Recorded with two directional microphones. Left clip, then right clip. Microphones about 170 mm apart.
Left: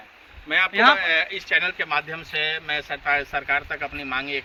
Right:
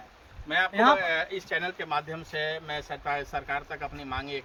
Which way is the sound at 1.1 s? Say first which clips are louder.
Left 7 dB; 50° right (ahead or behind).